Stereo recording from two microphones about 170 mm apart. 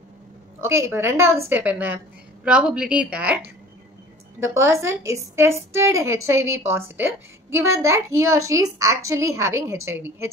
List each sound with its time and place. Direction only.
0.6 s a woman's voice: 15° right (ahead or behind)
4.4 s a woman's voice: 15° right (ahead or behind)